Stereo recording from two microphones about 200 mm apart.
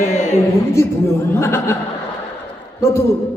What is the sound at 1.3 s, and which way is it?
Speech, 15° left (ahead or behind).